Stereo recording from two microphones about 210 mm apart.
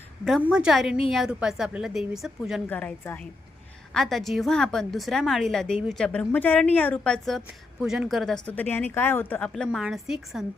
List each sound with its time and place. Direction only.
0.3 s a woman's voice: centre (ahead or behind)